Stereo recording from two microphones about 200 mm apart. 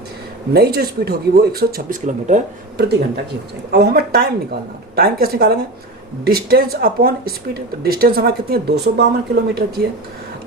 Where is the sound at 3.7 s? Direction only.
55° right (ahead or behind).